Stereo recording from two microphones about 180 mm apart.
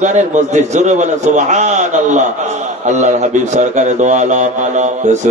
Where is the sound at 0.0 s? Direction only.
40° right (ahead or behind).